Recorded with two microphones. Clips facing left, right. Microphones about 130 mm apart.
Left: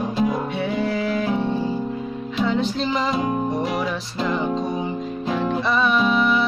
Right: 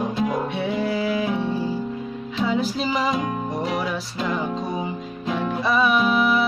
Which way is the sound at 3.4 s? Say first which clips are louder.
Left 2 dB; centre (ahead or behind).